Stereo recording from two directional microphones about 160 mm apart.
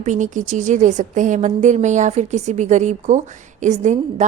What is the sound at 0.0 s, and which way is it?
A woman's voice, 50° right (ahead or behind).